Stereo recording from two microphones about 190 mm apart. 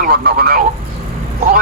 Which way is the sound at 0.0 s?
50° right (ahead or behind).